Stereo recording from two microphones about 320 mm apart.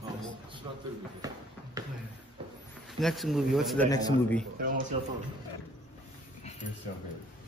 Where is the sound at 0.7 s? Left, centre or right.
Centre.